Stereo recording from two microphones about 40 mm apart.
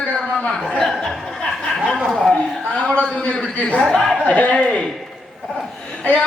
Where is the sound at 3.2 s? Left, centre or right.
Left.